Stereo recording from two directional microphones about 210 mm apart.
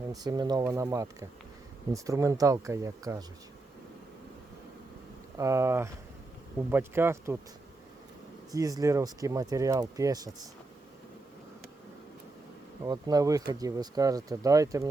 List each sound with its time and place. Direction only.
0.1 s speech: 20° right (ahead or behind)
5.4 s speech: 15° right (ahead or behind)
8.5 s speech: 15° right (ahead or behind)
12.8 s speech: 20° right (ahead or behind)